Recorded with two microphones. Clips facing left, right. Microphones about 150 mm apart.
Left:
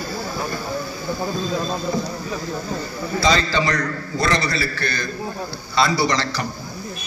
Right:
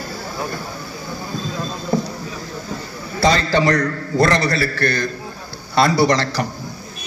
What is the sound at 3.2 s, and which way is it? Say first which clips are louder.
A man's voice: right 3 dB; 55° right (ahead or behind).